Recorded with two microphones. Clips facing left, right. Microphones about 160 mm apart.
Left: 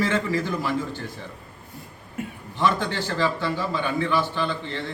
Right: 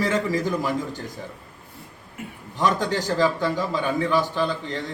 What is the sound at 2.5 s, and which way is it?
Speech, 40° right (ahead or behind).